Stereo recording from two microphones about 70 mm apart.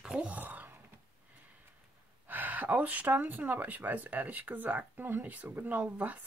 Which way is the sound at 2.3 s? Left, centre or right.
Right.